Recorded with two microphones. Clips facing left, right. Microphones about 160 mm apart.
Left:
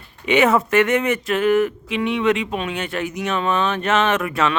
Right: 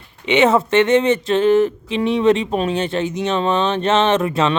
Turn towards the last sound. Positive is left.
turn(degrees=-25)  # may be behind; listen again after turning